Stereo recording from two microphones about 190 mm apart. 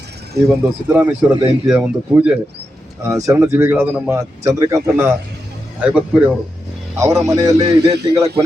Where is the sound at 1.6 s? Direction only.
5° right (ahead or behind).